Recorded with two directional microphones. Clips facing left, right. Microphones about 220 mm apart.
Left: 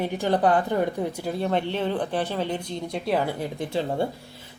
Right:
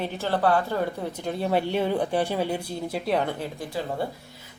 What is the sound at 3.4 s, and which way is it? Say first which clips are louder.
Speech: left 4 dB; 25° left (ahead or behind).